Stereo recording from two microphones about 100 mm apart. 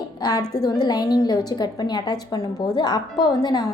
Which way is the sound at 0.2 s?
40° left (ahead or behind).